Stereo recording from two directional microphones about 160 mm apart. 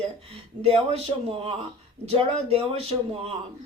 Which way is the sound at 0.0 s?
35° right (ahead or behind).